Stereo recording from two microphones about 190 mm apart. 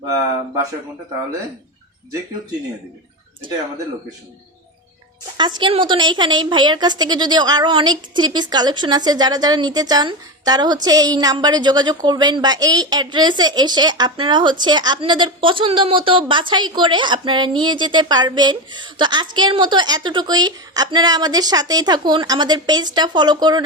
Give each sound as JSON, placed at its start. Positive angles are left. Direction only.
{"t": 5.4, "sound": "a woman's voice", "side_deg": -25}